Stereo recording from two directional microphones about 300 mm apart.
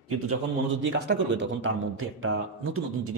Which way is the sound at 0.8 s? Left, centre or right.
Right.